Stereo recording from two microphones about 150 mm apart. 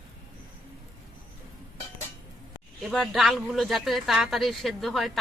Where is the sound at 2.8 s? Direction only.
Centre (ahead or behind).